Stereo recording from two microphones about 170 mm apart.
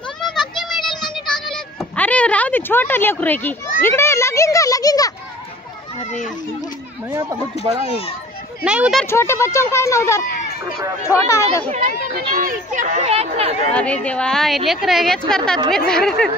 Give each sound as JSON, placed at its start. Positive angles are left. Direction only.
{"t": 0.2, "sound": "a sound", "side_deg": 0}
{"t": 7.1, "sound": "speech", "side_deg": -20}
{"t": 8.6, "sound": "a woman's voice", "side_deg": -5}
{"t": 9.0, "sound": "speech", "side_deg": 15}
{"t": 10.2, "sound": "run", "side_deg": 60}
{"t": 11.1, "sound": "speech", "side_deg": 15}
{"t": 12.4, "sound": "speech", "side_deg": -50}
{"t": 13.7, "sound": "a woman's voice", "side_deg": 5}